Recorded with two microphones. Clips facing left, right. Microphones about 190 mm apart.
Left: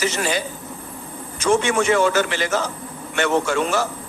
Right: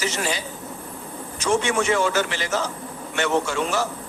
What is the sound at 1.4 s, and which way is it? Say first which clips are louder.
A man's voice: left 3 dB; 55° left (ahead or behind).